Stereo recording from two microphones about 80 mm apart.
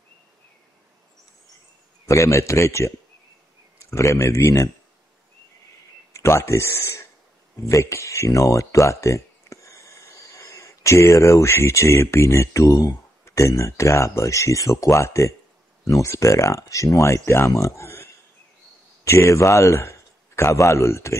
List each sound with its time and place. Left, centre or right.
2.0 s speech: left
6.1 s a man's voice: left